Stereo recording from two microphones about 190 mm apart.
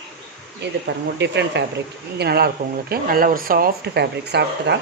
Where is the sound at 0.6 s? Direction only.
65° right (ahead or behind).